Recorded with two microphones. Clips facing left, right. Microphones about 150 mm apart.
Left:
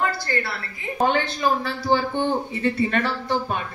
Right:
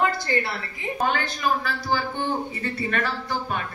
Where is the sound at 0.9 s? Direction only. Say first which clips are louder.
Left 5 dB; 30° left (ahead or behind).